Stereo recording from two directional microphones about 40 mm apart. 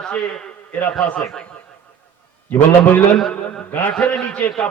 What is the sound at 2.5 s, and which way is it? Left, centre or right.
Speech, left.